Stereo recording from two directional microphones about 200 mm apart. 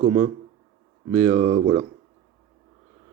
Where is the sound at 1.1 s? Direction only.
35° right (ahead or behind).